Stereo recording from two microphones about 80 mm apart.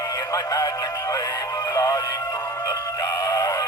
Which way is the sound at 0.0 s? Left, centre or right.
Left.